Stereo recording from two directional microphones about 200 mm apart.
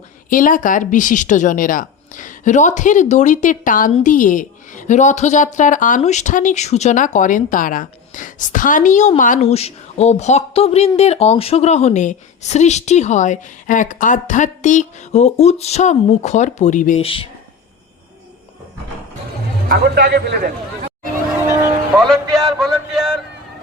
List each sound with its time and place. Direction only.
0.3 s a woman's voice: 45° left (ahead or behind)
19.6 s a man's voice: 55° right (ahead or behind)
21.9 s speech: centre (ahead or behind)